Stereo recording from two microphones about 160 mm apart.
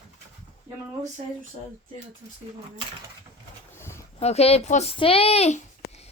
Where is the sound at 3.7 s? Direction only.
15° left (ahead or behind).